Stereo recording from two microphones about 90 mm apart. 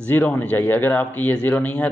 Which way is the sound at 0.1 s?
20° left (ahead or behind).